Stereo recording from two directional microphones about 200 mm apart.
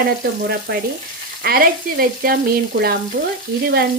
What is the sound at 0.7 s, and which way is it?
Frying, 50° right (ahead or behind).